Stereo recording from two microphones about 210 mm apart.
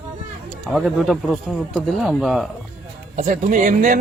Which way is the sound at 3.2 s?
35° right (ahead or behind).